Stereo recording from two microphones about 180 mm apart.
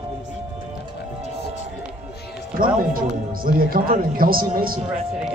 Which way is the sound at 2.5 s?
50° right (ahead or behind).